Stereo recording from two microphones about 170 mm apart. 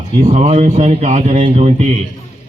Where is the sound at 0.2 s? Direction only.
50° right (ahead or behind).